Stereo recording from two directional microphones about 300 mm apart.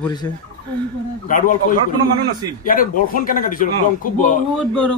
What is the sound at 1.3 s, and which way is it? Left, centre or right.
Speech, left.